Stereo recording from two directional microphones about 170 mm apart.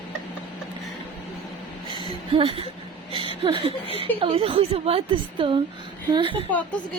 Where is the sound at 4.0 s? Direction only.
35° right (ahead or behind).